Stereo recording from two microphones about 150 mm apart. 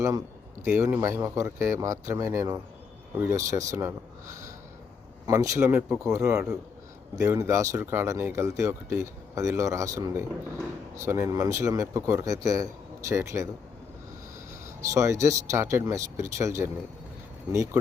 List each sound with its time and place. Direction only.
0.0 s a sound: 20° right (ahead or behind)
0.7 s speech: 15° right (ahead or behind)
14.8 s speech: 20° right (ahead or behind)